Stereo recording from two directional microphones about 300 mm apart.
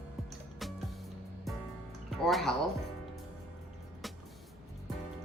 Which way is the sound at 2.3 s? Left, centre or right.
Centre.